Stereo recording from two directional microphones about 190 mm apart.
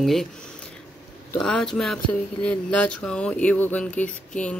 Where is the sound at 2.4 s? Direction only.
5° left (ahead or behind).